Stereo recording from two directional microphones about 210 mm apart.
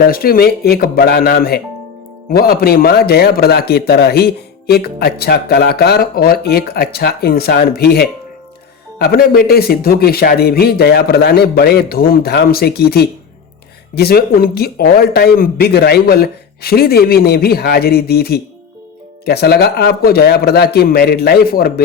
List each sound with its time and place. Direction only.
0.0 s a man's voice: 45° left (ahead or behind)